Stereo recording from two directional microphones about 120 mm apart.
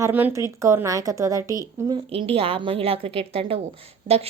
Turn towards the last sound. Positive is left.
turn(degrees=-60)  # may be behind; listen again after turning